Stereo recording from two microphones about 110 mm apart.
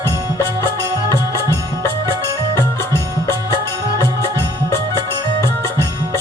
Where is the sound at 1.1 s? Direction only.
25° left (ahead or behind).